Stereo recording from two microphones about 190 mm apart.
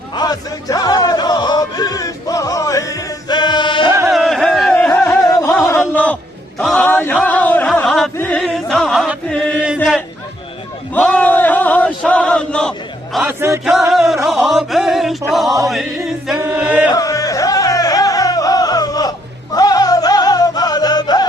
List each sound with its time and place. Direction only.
0.1 s music: 20° left (ahead or behind)
4.1 s music: centre (ahead or behind)
5.6 s a sound: 10° left (ahead or behind)
7.2 s music: 10° left (ahead or behind)
9.6 s a sound: centre (ahead or behind)
10.9 s chant: 10° left (ahead or behind)
13.2 s music: 15° right (ahead or behind)
13.7 s music: centre (ahead or behind)
14.3 s chant: centre (ahead or behind)
15.3 s music: centre (ahead or behind)
16.4 s chant: 5° right (ahead or behind)
16.9 s music: 20° left (ahead or behind)